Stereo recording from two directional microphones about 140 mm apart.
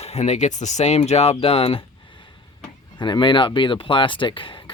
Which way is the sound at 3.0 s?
35° left (ahead or behind).